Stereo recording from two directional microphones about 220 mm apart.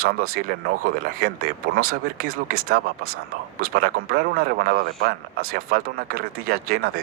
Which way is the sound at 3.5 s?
40° right (ahead or behind).